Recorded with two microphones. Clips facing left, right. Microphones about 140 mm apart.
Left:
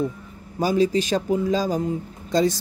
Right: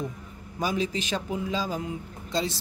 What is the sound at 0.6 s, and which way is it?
Speech, 35° left (ahead or behind).